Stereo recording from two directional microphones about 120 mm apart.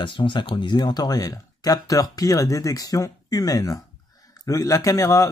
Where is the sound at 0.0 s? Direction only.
45° left (ahead or behind).